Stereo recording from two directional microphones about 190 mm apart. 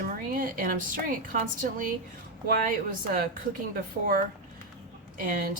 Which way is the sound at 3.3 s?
50° right (ahead or behind).